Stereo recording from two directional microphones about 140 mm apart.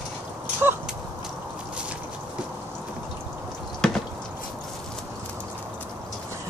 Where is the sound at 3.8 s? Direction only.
5° left (ahead or behind).